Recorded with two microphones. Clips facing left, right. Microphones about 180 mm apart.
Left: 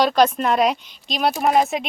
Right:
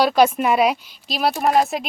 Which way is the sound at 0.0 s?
5° right (ahead or behind).